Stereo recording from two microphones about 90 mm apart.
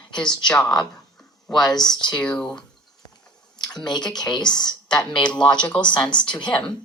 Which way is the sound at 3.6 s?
50° left (ahead or behind).